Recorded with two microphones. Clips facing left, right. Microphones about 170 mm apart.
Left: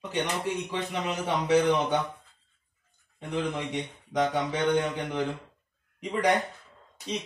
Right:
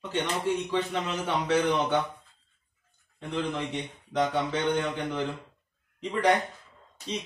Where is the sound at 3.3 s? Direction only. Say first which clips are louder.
Left 1 dB; 15° left (ahead or behind).